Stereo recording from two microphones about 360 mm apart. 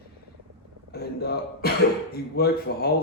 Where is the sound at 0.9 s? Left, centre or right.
Left.